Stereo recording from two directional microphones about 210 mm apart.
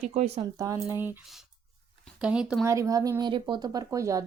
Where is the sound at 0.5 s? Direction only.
15° right (ahead or behind).